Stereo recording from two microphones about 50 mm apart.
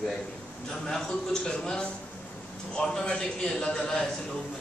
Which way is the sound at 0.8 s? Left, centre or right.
Centre.